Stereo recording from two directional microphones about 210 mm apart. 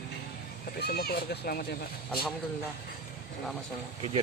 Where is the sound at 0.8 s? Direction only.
50° left (ahead or behind).